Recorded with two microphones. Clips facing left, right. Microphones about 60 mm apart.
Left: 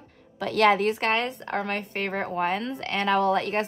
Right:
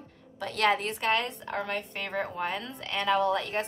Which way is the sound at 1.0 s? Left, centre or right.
Left.